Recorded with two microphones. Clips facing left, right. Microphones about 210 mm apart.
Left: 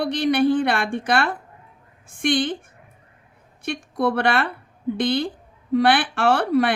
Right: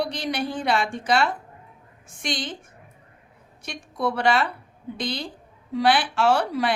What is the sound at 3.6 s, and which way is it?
A woman's voice, 55° left (ahead or behind).